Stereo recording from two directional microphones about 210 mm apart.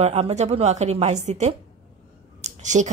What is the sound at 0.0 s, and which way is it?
Speech, 30° right (ahead or behind).